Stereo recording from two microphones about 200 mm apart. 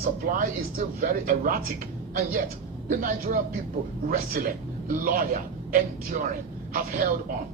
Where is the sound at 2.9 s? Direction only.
45° right (ahead or behind).